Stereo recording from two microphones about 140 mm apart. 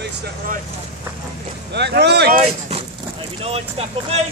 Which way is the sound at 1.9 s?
90° right.